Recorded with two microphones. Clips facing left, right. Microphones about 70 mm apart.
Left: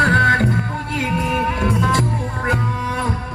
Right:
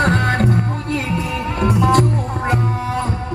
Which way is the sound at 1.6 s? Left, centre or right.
Right.